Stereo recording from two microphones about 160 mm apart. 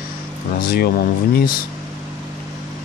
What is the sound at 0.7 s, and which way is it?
Speech, 70° left (ahead or behind).